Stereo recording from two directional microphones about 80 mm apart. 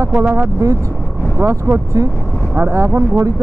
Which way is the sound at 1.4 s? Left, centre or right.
Right.